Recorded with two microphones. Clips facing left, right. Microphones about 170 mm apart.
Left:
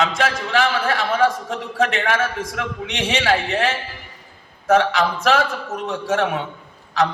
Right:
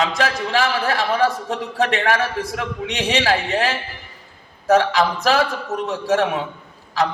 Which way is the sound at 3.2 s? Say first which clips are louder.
Even; 40° right (ahead or behind).